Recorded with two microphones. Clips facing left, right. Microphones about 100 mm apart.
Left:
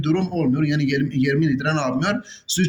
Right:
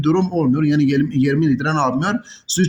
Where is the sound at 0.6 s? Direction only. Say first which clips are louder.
Right 5 dB; 35° right (ahead or behind).